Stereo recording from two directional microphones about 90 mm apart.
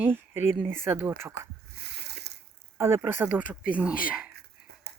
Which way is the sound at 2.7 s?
30° right (ahead or behind).